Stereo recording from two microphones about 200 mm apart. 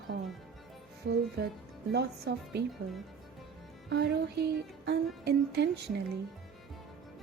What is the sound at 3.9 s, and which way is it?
Speech, 55° right (ahead or behind).